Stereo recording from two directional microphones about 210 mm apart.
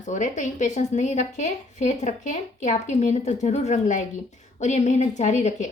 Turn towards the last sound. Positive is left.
turn(degrees=35)  # may be behind; listen again after turning